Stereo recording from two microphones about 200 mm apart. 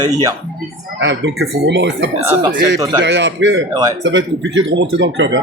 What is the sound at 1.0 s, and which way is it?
Speech, 65° right (ahead or behind).